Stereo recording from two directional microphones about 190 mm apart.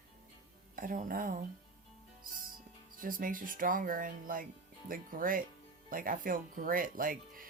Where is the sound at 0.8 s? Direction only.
45° right (ahead or behind).